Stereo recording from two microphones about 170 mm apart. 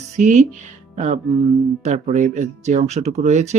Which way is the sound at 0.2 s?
45° right (ahead or behind).